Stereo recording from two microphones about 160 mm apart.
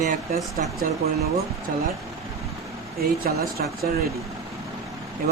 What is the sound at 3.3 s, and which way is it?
Speech, 65° right (ahead or behind).